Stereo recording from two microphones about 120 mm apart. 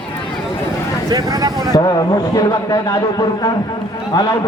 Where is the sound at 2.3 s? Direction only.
30° left (ahead or behind).